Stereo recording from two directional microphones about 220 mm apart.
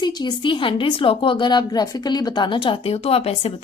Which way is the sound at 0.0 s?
20° left (ahead or behind).